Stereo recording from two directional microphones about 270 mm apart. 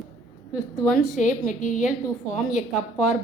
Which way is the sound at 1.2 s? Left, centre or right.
Left.